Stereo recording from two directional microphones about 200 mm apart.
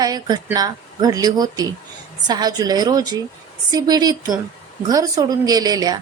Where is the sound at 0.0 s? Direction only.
20° right (ahead or behind).